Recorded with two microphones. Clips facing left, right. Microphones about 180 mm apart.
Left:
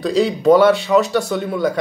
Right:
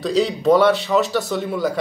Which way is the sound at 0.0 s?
Centre (ahead or behind).